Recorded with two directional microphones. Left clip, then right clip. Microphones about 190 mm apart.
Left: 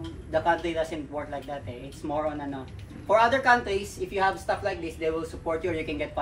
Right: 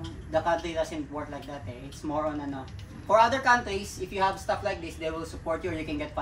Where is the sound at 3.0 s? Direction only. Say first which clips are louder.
Left 1 dB; 5° right (ahead or behind).